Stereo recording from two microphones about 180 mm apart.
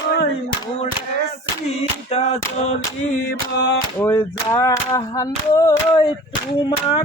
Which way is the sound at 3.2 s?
70° left (ahead or behind).